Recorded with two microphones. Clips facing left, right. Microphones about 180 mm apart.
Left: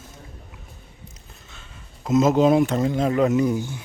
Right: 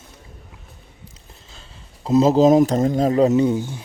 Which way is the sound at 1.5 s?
35° right (ahead or behind).